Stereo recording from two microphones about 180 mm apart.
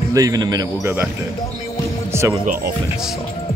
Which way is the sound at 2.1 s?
15° right (ahead or behind).